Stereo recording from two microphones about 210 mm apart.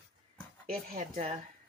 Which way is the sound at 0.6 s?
45° right (ahead or behind).